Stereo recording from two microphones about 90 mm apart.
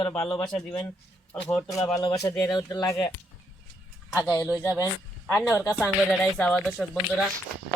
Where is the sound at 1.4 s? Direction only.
35° left (ahead or behind); by 2.8 s 50° left (ahead or behind).